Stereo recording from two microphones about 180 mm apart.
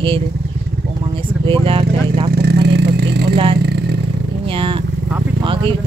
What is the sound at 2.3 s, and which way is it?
Vehicle, 65° right (ahead or behind).